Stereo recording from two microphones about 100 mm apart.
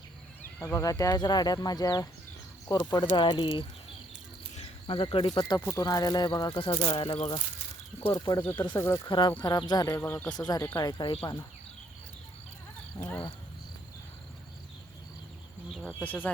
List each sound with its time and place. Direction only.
0.6 s speech: 30° left (ahead or behind); by 3.7 s 55° left (ahead or behind)
4.5 s cricket: 60° left (ahead or behind)
5.1 s speech: 60° left (ahead or behind)
5.6 s speech: 40° left (ahead or behind); by 7.4 s 60° left (ahead or behind)
8.1 s speech: 40° left (ahead or behind)
9.0 s speech: 55° left (ahead or behind)
9.4 s speech: 45° left (ahead or behind)
10.2 s speech: 45° left (ahead or behind)
11.0 s speech: 70° left (ahead or behind)
16.0 s speech: 15° left (ahead or behind)